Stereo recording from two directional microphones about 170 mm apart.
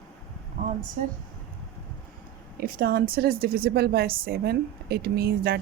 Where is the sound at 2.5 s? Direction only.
60° right (ahead or behind).